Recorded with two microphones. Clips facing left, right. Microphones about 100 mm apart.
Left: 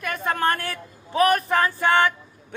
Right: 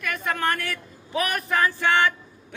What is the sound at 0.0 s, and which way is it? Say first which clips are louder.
A man's voice: left 3 dB; 35° left (ahead or behind).